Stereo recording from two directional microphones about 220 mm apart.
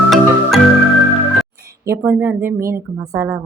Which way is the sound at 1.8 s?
10° right (ahead or behind).